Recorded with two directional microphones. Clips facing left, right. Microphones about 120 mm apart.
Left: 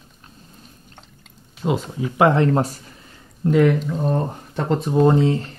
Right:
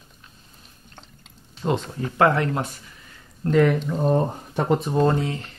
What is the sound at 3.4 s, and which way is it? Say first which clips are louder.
Speech: left 2 dB; 5° left (ahead or behind).